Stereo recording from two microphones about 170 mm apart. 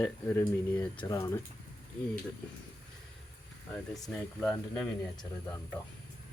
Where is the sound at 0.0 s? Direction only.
10° left (ahead or behind).